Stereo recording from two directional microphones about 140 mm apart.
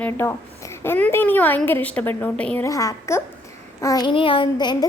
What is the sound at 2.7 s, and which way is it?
A woman's voice, 25° left (ahead or behind).